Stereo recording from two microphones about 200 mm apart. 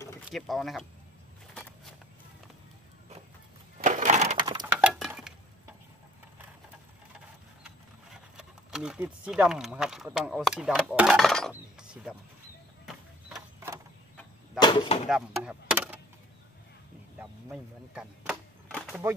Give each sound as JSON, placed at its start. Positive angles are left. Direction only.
{"t": 0.3, "sound": "speech", "side_deg": 0}
{"t": 3.8, "sound": "crushing", "side_deg": -35}
{"t": 4.7, "sound": "a sound", "side_deg": -5}
{"t": 7.6, "sound": "speech", "side_deg": -5}
{"t": 14.6, "sound": "speech", "side_deg": 20}
{"t": 15.0, "sound": "chop", "side_deg": -5}
{"t": 17.2, "sound": "speech", "side_deg": -5}
{"t": 18.7, "sound": "a sound", "side_deg": 5}